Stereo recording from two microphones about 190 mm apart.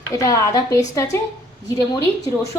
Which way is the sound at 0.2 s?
15° left (ahead or behind).